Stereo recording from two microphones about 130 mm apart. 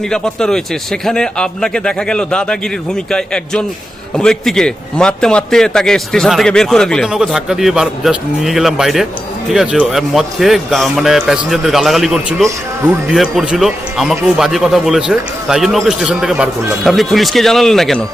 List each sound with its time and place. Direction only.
0.1 s a man's voice: 5° left (ahead or behind)